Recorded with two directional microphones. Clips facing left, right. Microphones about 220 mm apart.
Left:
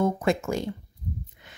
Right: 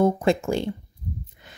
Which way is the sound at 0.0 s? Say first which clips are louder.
Right 4 dB; 30° right (ahead or behind).